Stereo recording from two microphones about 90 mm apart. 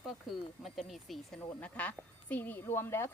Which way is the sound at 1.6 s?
15° left (ahead or behind).